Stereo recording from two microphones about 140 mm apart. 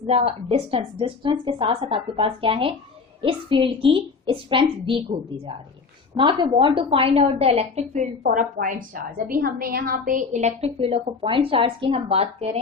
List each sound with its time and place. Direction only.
0.1 s a woman's voice: 45° right (ahead or behind)
6.1 s a woman's voice: 35° right (ahead or behind); by 8.0 s 50° right (ahead or behind)
8.2 s a woman's voice: 85° right
9.1 s a woman's voice: 90° right; by 12.5 s 45° right (ahead or behind)